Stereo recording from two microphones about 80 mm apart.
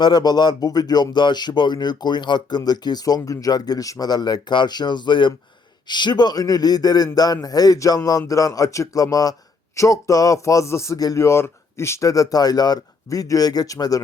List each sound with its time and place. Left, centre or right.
0.0 s speech: left